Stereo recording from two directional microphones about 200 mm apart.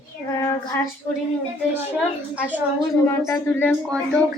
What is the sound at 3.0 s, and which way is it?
Speech, 15° left (ahead or behind).